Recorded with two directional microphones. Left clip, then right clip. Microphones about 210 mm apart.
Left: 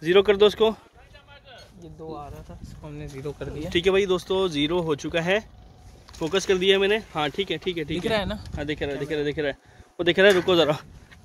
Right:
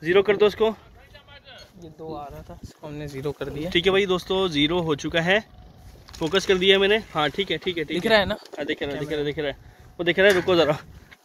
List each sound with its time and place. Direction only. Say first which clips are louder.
0.0 s speech: left 1 dB; 25° left (ahead or behind)
2.0 s speech: right 2 dB; 20° right (ahead or behind)
2.8 s speech: right 5 dB; 50° right (ahead or behind)
3.6 s speech: right 1 dB; 5° left (ahead or behind)
8.1 s speech: right 8 dB; 30° right (ahead or behind)
8.5 s speech: left 1 dB; 20° left (ahead or behind)
10.5 s speech: right 1 dB; 15° left (ahead or behind)